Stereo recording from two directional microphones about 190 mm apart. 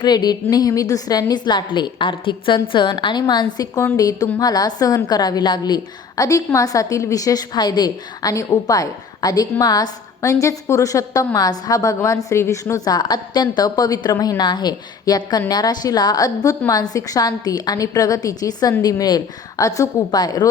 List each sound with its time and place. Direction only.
0.0 s a woman's voice: 20° left (ahead or behind)